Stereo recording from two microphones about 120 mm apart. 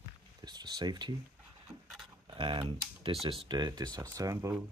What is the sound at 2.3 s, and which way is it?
Speech, 45° right (ahead or behind).